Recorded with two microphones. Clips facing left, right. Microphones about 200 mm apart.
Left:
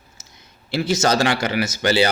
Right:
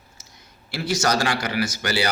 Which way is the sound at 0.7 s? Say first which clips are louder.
Left 4 dB; 25° left (ahead or behind).